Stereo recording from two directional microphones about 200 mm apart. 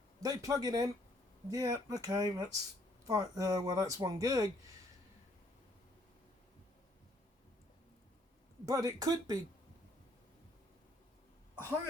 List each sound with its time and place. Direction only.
0.2 s speech: 15° right (ahead or behind)
8.6 s speech: 15° right (ahead or behind)